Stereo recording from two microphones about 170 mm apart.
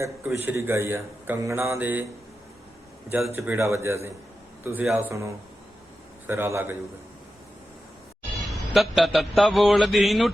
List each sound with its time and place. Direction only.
0.0 s speech: 10° right (ahead or behind)
3.1 s speech: 15° right (ahead or behind)
8.4 s mantra: centre (ahead or behind)